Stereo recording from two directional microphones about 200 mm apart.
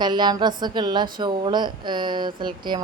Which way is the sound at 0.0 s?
20° right (ahead or behind).